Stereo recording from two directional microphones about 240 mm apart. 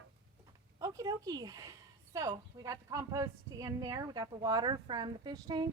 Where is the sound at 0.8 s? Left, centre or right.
Centre.